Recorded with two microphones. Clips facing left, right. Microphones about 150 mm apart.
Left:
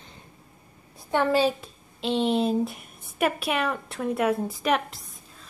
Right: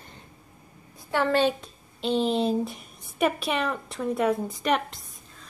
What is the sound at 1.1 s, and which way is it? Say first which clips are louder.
Speech: left 1 dB; 15° left (ahead or behind).